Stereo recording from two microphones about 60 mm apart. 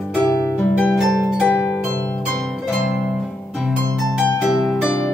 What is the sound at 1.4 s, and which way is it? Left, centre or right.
Harp, left.